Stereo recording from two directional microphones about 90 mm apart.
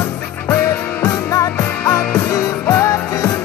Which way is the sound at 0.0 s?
30° left (ahead or behind).